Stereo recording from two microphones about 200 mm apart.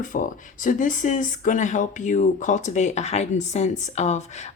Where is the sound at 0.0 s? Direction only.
40° left (ahead or behind).